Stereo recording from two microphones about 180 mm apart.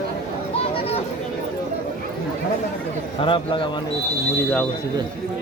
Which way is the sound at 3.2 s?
30° left (ahead or behind).